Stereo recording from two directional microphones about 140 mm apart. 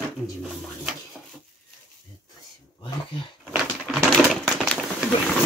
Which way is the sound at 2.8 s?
35° left (ahead or behind).